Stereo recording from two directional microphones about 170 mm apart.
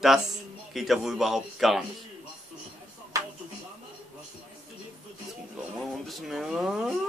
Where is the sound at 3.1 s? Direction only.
20° right (ahead or behind).